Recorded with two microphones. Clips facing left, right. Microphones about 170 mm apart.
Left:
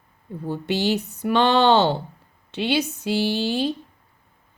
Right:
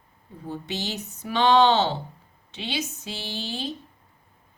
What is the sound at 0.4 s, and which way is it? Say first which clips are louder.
A woman's voice: left 9 dB; 60° left (ahead or behind).